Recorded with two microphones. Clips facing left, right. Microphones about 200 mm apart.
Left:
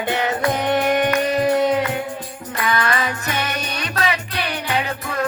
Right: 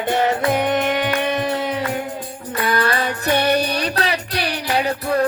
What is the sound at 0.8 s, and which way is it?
Music, 45° left (ahead or behind).